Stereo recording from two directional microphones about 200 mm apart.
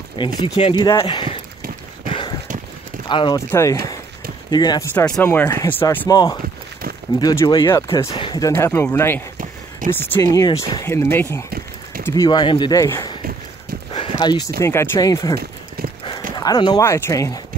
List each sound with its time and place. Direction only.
0.2 s speech: 25° left (ahead or behind)
2.0 s boat: 25° left (ahead or behind)
3.1 s speech: 20° left (ahead or behind)
5.1 s speech: 10° left (ahead or behind)
13.9 s a sound: 25° left (ahead or behind)
14.6 s speech: 15° left (ahead or behind)
16.3 s speech: 20° left (ahead or behind)